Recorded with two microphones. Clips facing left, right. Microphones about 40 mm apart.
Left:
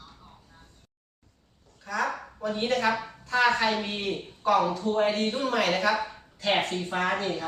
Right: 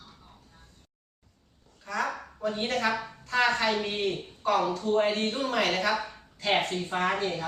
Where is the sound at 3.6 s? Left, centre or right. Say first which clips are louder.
Even; left.